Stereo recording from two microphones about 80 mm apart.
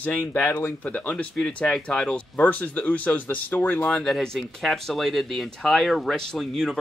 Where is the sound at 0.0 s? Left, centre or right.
Left.